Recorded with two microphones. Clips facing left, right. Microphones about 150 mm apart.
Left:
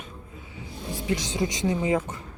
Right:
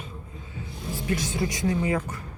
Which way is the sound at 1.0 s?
20° left (ahead or behind).